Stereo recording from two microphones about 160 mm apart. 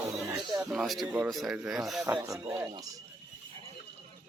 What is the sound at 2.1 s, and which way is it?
Speech, 20° right (ahead or behind).